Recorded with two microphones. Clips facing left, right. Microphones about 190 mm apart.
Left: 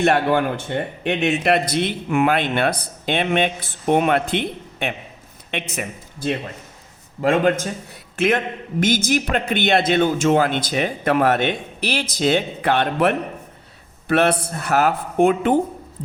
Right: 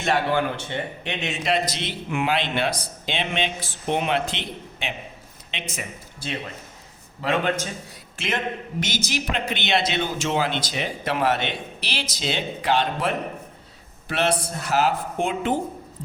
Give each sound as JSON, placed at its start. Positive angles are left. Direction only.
{"t": 0.0, "sound": "a man's voice", "side_deg": 55}
{"t": 7.2, "sound": "a man's voice", "side_deg": 45}